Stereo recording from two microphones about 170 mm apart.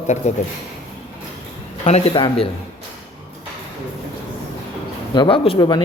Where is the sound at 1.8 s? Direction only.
30° left (ahead or behind).